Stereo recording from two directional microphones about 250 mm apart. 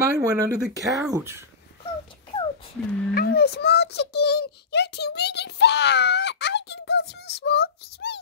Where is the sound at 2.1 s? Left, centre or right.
Left.